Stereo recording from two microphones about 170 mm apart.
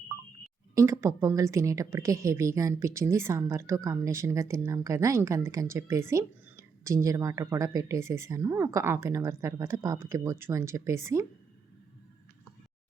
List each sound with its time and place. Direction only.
0.8 s speech: 15° right (ahead or behind)